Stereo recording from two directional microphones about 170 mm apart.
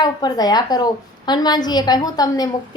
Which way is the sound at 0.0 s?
25° left (ahead or behind).